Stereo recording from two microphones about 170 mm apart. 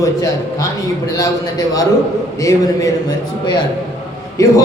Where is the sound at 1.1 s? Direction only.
20° left (ahead or behind).